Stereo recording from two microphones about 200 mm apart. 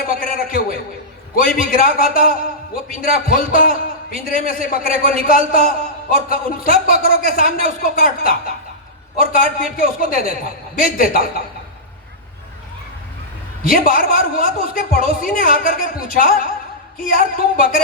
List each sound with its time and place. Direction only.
0.1 s a sound: 45° left (ahead or behind)
1.4 s a man's voice: 45° left (ahead or behind)
13.7 s a man's voice: 45° left (ahead or behind)